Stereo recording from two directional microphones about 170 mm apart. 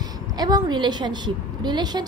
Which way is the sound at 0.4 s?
25° right (ahead or behind).